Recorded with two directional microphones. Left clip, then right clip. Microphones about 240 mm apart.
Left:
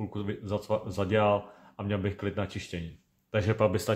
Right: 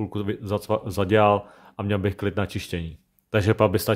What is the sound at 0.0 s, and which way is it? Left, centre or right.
Speech, right.